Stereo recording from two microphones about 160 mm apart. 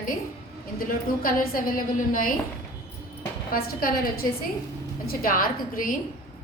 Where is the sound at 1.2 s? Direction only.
60° left (ahead or behind).